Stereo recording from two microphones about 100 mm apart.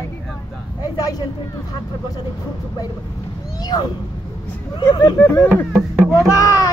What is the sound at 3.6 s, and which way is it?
A woman's voice, 40° left (ahead or behind).